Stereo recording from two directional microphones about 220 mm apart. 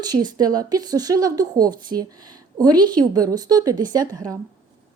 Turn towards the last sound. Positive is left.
turn(degrees=-15)  # may be behind; listen again after turning